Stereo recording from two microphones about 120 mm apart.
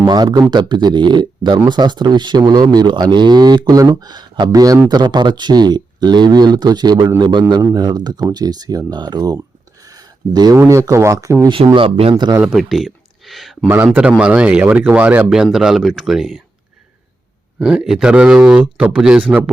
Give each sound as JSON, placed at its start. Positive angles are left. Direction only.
{"t": 0.0, "sound": "speech", "side_deg": -40}
{"t": 9.8, "sound": "a sound", "side_deg": -30}
{"t": 10.6, "sound": "speech", "side_deg": -25}
{"t": 11.4, "sound": "speech", "side_deg": -45}
{"t": 12.1, "sound": "speech", "side_deg": -35}
{"t": 12.4, "sound": "speech", "side_deg": -5}
{"t": 13.7, "sound": "speech", "side_deg": -20}
{"t": 17.6, "sound": "speech", "side_deg": -5}